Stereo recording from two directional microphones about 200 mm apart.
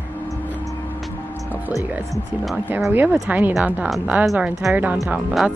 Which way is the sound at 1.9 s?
Centre (ahead or behind).